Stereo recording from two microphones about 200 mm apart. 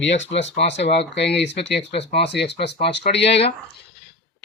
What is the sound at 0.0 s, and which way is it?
Speech, 65° left (ahead or behind).